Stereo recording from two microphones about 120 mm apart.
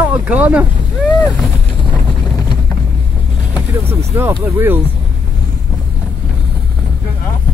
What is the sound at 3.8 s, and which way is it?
Speech, 20° right (ahead or behind).